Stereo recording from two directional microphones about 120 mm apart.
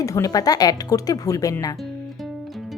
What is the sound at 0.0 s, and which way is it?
A woman's voice, 30° left (ahead or behind).